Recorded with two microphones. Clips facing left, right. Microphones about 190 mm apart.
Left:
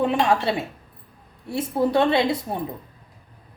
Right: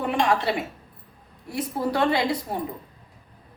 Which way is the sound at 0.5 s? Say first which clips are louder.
Left 1 dB; 25° left (ahead or behind).